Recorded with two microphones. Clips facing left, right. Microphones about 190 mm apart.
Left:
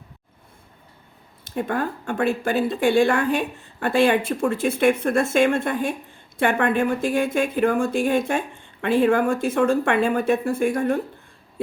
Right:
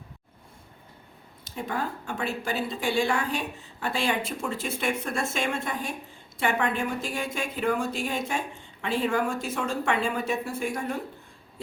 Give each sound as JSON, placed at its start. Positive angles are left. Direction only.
{"t": 1.5, "sound": "speech", "side_deg": 55}